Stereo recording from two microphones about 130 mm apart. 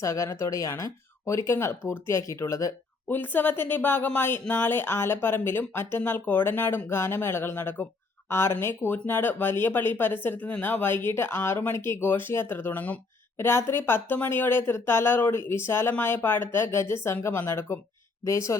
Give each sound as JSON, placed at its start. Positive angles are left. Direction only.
{"t": 0.0, "sound": "speech", "side_deg": 25}